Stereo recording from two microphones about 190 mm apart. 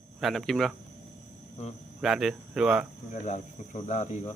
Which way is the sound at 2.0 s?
Centre (ahead or behind).